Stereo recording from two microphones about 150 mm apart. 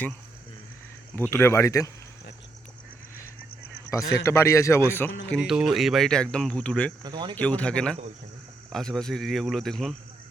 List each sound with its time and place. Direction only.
1.3 s speech: 15° left (ahead or behind)
4.1 s a man's voice: 20° left (ahead or behind)
5.3 s speech: 5° right (ahead or behind)
7.0 s speech: 30° right (ahead or behind)
7.3 s a man's voice: 10° left (ahead or behind)